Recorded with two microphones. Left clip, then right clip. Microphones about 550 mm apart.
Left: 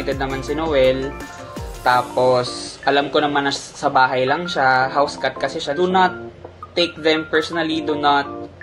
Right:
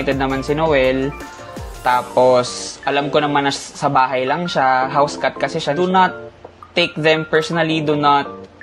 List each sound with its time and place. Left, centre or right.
0.0 s speech: right
1.9 s speech: right